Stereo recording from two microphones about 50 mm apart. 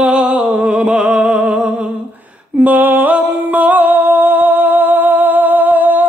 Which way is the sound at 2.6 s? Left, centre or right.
Right.